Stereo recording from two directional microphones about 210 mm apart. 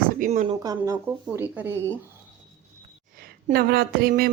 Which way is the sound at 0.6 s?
15° right (ahead or behind).